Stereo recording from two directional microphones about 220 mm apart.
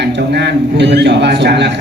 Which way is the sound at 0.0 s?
50° right (ahead or behind).